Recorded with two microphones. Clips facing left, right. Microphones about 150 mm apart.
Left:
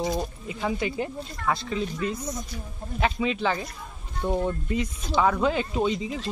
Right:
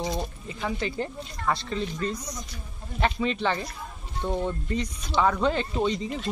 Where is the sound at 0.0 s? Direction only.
5° left (ahead or behind).